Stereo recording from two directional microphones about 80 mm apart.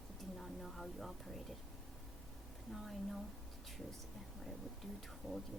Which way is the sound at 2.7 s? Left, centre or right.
Centre.